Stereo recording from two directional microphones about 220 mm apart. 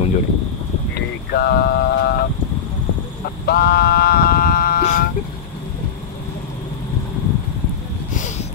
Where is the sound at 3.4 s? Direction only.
45° left (ahead or behind).